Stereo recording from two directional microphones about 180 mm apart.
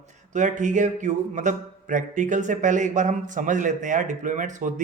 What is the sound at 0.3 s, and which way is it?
Speech, 45° right (ahead or behind).